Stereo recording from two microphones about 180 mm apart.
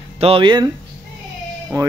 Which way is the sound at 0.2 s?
30° right (ahead or behind).